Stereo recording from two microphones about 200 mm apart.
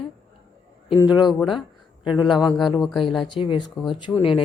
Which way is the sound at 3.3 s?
25° left (ahead or behind).